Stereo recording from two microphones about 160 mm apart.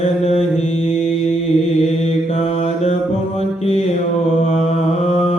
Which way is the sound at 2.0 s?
40° left (ahead or behind).